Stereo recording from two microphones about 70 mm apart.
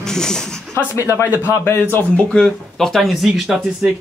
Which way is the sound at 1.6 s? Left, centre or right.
Left.